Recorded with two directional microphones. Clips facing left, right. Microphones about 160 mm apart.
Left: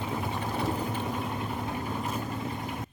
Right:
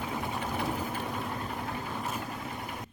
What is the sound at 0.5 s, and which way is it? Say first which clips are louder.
Vehicle: left 4 dB; 5° left (ahead or behind).